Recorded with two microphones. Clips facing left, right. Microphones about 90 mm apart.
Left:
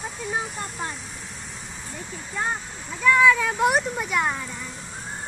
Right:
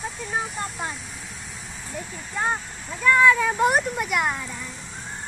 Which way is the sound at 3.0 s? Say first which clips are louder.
Even; centre (ahead or behind).